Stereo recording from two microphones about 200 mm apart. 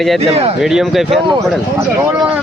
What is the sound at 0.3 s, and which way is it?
Speech, 30° right (ahead or behind).